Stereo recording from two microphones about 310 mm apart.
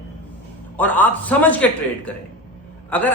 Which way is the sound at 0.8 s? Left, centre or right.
Centre.